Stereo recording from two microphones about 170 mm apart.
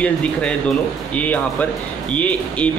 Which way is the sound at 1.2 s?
10° left (ahead or behind).